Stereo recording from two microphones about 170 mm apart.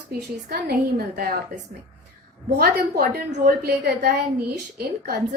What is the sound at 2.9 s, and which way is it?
A woman's voice, 70° right (ahead or behind).